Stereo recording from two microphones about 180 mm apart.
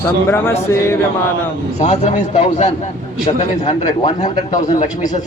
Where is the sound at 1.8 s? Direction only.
40° left (ahead or behind).